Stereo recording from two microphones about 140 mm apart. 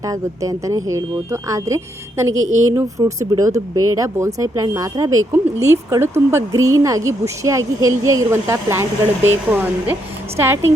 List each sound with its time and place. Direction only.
0.0 s speech: 25° right (ahead or behind)